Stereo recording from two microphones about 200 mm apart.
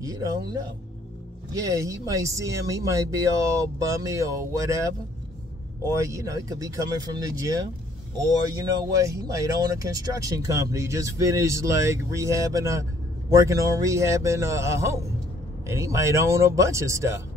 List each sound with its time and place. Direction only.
0.0 s speech: 15° right (ahead or behind)
5.9 s speech: 15° right (ahead or behind)